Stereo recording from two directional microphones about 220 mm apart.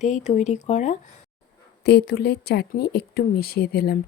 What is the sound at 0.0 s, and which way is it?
Speech, 30° left (ahead or behind).